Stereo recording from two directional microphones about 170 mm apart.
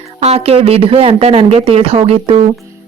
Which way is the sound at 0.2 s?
35° right (ahead or behind).